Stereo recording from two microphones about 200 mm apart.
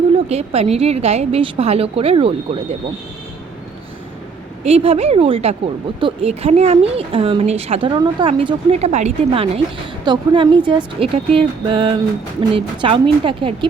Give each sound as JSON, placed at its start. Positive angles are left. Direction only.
{"t": 0.3, "sound": "a woman's voice", "side_deg": -35}
{"t": 4.6, "sound": "a woman's voice", "side_deg": -30}